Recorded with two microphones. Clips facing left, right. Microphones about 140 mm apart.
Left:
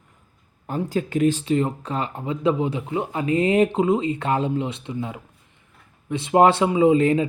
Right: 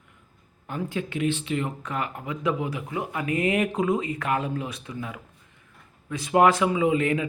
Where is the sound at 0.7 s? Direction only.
40° left (ahead or behind).